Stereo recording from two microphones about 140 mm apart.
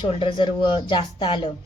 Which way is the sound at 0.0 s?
35° left (ahead or behind).